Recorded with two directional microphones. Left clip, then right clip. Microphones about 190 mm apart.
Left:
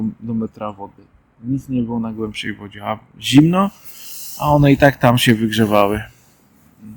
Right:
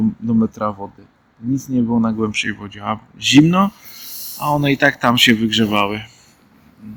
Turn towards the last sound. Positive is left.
turn(degrees=35)  # may be behind; listen again after turning